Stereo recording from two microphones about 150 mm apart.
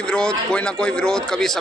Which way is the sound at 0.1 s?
5° left (ahead or behind).